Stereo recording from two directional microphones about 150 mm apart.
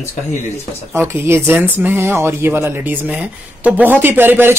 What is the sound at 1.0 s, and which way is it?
Speech, 15° right (ahead or behind).